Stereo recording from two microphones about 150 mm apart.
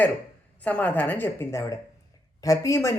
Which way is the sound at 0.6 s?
10° left (ahead or behind).